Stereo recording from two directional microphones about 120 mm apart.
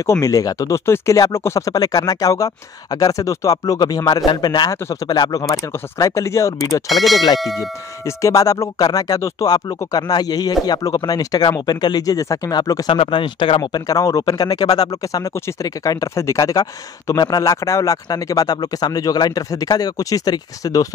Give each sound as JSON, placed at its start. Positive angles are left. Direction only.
{"t": 0.0, "sound": "speech", "side_deg": 25}
{"t": 6.9, "sound": "speech", "side_deg": 0}
{"t": 8.0, "sound": "speech", "side_deg": 25}
{"t": 12.9, "sound": "speech", "side_deg": 45}